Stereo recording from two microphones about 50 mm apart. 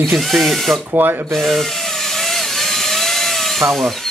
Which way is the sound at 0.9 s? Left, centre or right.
Right.